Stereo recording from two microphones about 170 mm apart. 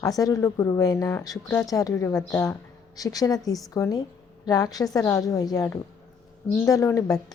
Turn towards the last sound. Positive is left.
turn(degrees=20)  # may be behind; listen again after turning